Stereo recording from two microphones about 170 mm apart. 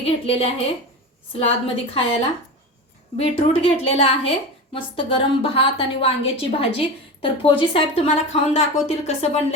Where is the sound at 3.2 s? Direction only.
35° left (ahead or behind).